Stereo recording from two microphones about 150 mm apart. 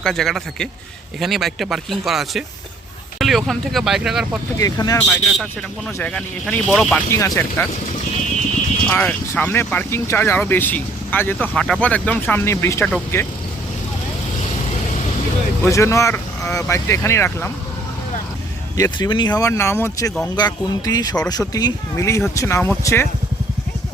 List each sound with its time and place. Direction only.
0.0 s speech: 5° left (ahead or behind)
4.5 s speech: 25° left (ahead or behind)
5.0 s speech: centre (ahead or behind)
7.1 s speech: 20° left (ahead or behind)
8.9 s speech: 10° left (ahead or behind)
15.6 s speech: 20° left (ahead or behind)
18.8 s speech: 30° left (ahead or behind)